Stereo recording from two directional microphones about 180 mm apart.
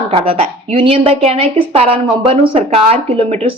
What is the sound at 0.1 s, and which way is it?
Speech, 30° right (ahead or behind).